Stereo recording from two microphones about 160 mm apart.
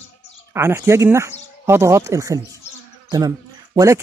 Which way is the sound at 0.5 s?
15° right (ahead or behind).